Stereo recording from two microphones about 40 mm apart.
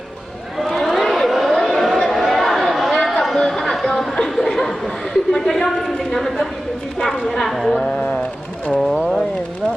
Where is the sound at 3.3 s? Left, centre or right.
Centre.